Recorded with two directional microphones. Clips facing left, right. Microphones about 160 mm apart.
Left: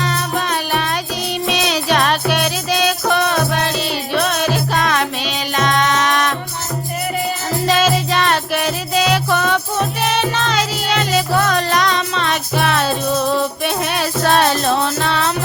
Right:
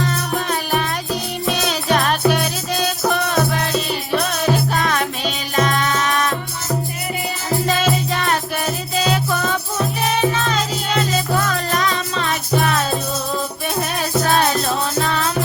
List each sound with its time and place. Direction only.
0.0 s music: 80° left
7.7 s music: 85° left